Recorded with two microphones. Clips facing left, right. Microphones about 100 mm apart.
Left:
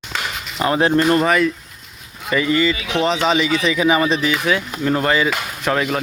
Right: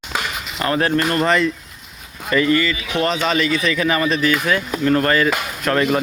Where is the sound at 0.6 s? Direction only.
15° left (ahead or behind).